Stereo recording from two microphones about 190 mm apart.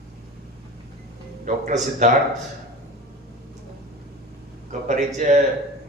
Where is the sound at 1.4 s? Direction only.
40° right (ahead or behind).